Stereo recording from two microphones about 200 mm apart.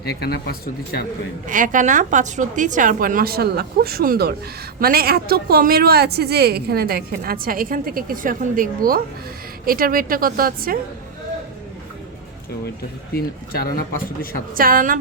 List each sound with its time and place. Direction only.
0.0 s speech: 55° left (ahead or behind)
1.5 s a woman's voice: 40° right (ahead or behind)
13.1 s speech: 50° left (ahead or behind)
14.5 s a woman's voice: 45° right (ahead or behind)